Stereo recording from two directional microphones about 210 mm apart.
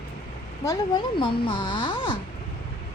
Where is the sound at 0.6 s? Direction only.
20° left (ahead or behind).